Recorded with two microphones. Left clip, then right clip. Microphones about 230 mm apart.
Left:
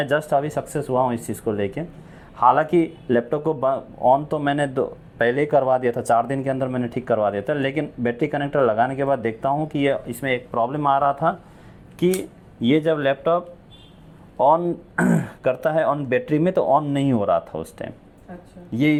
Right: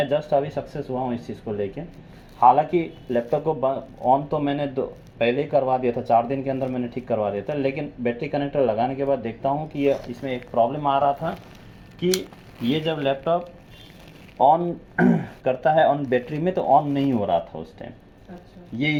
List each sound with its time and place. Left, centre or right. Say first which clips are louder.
0.1 s speech: left 1 dB; left
12.7 s speech: left 4 dB; left